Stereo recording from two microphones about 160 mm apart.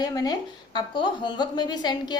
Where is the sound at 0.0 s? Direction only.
25° left (ahead or behind).